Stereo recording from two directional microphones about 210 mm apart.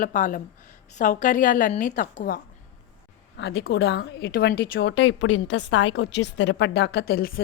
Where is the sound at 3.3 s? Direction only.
50° left (ahead or behind).